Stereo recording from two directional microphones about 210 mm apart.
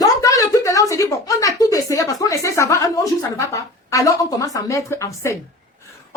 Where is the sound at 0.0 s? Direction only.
15° left (ahead or behind).